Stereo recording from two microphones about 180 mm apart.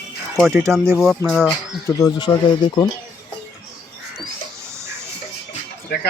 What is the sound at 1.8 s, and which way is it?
Speech, 20° left (ahead or behind).